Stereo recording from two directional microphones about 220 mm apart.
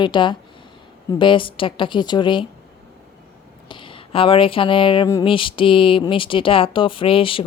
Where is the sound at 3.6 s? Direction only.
25° left (ahead or behind).